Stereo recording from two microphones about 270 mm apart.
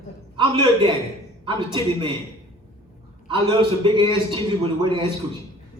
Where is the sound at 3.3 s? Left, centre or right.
Centre.